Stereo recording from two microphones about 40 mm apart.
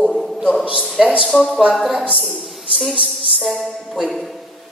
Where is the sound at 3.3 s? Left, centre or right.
Centre.